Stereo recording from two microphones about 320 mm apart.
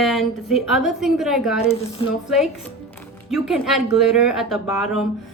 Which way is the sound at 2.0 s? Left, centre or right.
Centre.